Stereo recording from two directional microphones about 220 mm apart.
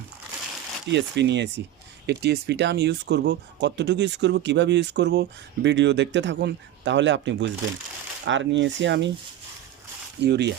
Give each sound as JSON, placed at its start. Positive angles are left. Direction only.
{"t": 0.9, "sound": "speech", "side_deg": -55}
{"t": 10.2, "sound": "speech", "side_deg": -50}